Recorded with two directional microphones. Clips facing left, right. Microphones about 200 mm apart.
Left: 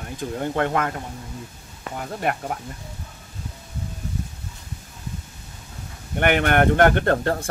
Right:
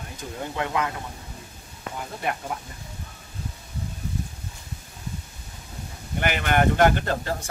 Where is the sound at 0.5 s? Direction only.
50° left (ahead or behind).